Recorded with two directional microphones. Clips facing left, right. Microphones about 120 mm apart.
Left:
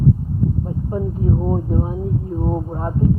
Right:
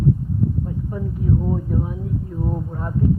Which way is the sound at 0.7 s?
30° left (ahead or behind).